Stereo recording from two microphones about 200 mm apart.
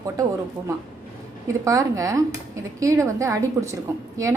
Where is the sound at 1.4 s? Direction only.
15° right (ahead or behind).